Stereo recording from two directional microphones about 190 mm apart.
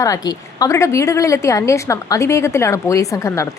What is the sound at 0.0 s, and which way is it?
A woman's voice, 20° left (ahead or behind).